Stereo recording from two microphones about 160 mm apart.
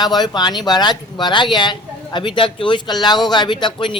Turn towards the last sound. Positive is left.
turn(degrees=30)  # may be behind; listen again after turning